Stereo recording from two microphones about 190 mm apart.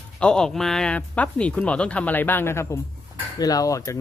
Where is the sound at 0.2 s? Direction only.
5° left (ahead or behind).